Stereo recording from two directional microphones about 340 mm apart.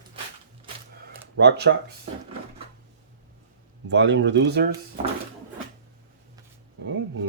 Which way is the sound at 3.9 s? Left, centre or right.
Right.